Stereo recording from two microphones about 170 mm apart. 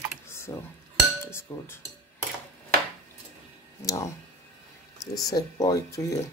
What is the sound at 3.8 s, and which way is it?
Speech, 20° left (ahead or behind).